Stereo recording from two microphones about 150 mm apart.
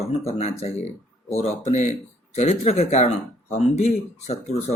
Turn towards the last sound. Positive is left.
turn(degrees=45)  # may be behind; listen again after turning